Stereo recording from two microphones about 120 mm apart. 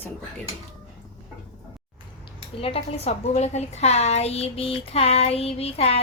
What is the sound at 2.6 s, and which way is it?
A woman's voice, 55° left (ahead or behind).